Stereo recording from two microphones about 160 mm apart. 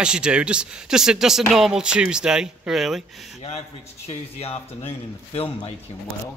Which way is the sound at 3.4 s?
40° left (ahead or behind).